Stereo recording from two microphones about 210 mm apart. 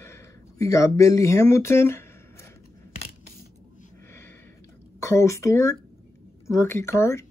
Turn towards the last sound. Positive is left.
turn(degrees=15)  # may be behind; listen again after turning